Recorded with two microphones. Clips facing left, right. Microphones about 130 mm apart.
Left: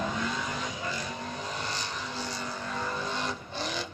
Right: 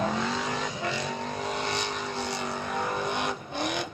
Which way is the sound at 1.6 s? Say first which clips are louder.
Right 5 dB; 65° right (ahead or behind).